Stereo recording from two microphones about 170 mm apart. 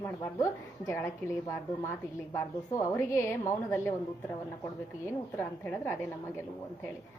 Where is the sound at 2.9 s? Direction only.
15° left (ahead or behind).